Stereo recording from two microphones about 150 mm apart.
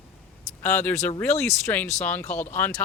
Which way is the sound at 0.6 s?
10° left (ahead or behind).